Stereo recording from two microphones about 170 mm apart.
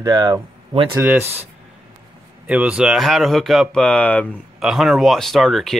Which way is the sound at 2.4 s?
5° right (ahead or behind).